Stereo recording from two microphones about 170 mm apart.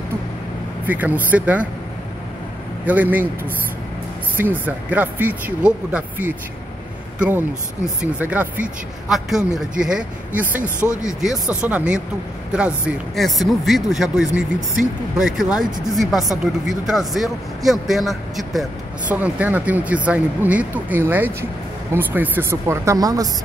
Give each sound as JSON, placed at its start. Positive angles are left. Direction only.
{"t": 0.8, "sound": "speech", "side_deg": -10}
{"t": 2.8, "sound": "speech", "side_deg": -10}
{"t": 4.4, "sound": "speech", "side_deg": -10}
{"t": 9.8, "sound": "speech", "side_deg": -5}
{"t": 10.9, "sound": "speech", "side_deg": 20}
{"t": 11.1, "sound": "speech", "side_deg": -5}